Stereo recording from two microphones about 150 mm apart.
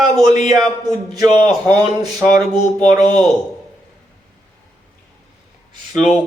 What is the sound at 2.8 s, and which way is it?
Speech, centre (ahead or behind).